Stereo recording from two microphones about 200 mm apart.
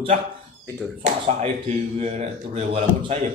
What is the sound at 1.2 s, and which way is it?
A man's voice, 35° right (ahead or behind).